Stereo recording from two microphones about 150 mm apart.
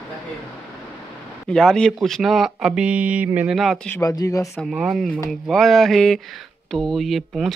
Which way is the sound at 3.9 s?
20° left (ahead or behind).